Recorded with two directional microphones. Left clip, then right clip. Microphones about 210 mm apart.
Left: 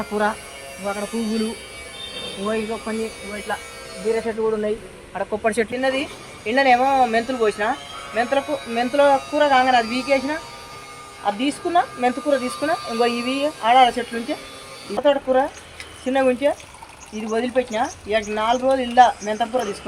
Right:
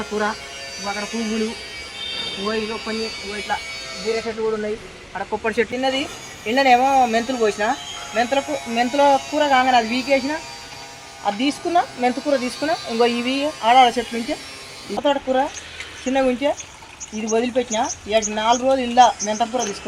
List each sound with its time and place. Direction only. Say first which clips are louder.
0.0 s speech: left 1 dB; 50° left (ahead or behind)
5.7 s speech: even; 10° right (ahead or behind)